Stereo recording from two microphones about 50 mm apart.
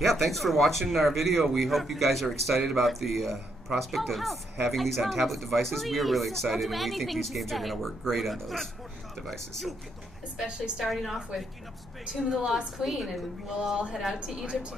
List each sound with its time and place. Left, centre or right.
0.0 s speech: centre
8.0 s a woman's voice: centre
8.3 s speech: centre
10.3 s a woman's voice: centre
10.9 s speech: centre
12.1 s a woman's voice: centre
14.2 s a woman's voice: centre